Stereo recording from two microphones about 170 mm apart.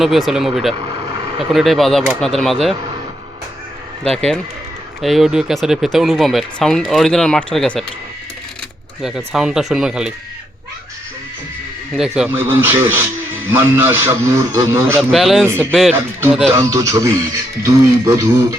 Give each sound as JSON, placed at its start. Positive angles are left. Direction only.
{"t": 0.0, "sound": "speech", "side_deg": 0}
{"t": 4.0, "sound": "speech", "side_deg": 5}
{"t": 9.0, "sound": "speech", "side_deg": -5}
{"t": 11.9, "sound": "speech", "side_deg": -5}
{"t": 15.1, "sound": "speech", "side_deg": 0}
{"t": 16.6, "sound": "speech", "side_deg": -20}